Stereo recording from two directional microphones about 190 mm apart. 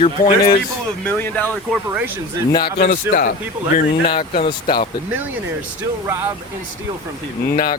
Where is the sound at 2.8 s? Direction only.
50° left (ahead or behind).